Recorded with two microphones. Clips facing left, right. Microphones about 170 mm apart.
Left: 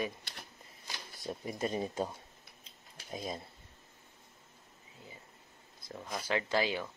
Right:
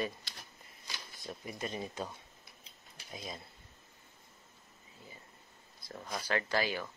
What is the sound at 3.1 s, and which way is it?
Speech, 45° left (ahead or behind).